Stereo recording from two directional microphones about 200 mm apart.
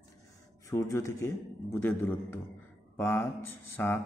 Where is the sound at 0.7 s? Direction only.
15° left (ahead or behind).